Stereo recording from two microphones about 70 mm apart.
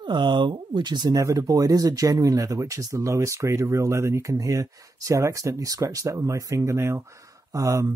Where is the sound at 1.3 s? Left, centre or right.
Right.